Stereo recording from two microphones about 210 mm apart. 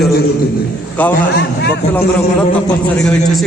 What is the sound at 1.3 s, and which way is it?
Speech, 50° left (ahead or behind).